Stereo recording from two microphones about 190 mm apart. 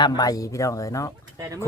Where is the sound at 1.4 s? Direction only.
15° right (ahead or behind).